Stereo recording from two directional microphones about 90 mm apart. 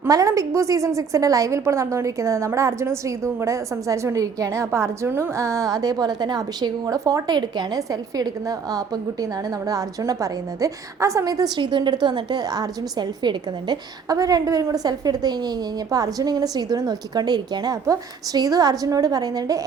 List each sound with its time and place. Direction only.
0.1 s a woman's voice: 40° right (ahead or behind)
7.3 s a woman's voice: 50° right (ahead or behind)
11.5 s a woman's voice: 60° right (ahead or behind); by 19.6 s 40° right (ahead or behind)